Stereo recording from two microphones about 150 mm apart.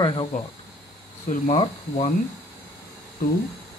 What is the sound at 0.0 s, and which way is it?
Speech, 35° left (ahead or behind).